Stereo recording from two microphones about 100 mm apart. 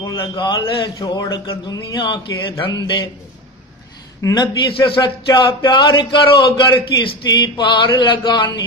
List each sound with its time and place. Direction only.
0.4 s speech: 50° left (ahead or behind)
4.2 s a man's voice: 40° left (ahead or behind)
4.6 s speech: 55° left (ahead or behind)